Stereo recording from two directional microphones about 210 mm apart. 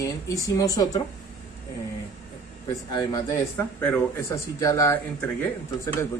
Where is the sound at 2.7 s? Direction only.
20° left (ahead or behind).